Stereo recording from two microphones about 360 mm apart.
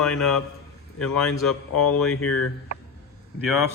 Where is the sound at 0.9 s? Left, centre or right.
Left.